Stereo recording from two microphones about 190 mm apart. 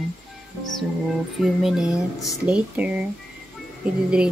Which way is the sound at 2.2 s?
5° right (ahead or behind).